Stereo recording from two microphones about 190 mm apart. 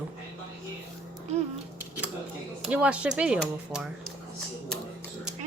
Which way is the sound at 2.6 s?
5° right (ahead or behind).